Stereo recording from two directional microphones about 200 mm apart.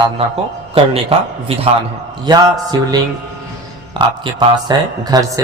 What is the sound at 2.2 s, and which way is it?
A man's voice, 20° right (ahead or behind).